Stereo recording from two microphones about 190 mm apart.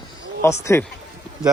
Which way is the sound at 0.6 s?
15° left (ahead or behind).